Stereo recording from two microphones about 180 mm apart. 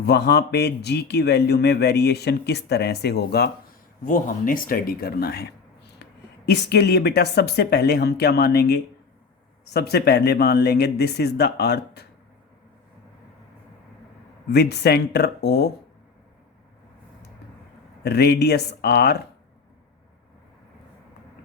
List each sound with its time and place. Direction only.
0.0 s speech: 65° left (ahead or behind)
4.0 s speech: 50° left (ahead or behind); by 12.0 s 65° left (ahead or behind)
14.5 s speech: 65° left (ahead or behind)
18.0 s speech: 65° left (ahead or behind)